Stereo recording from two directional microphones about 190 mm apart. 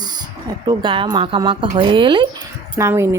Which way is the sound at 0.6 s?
25° right (ahead or behind).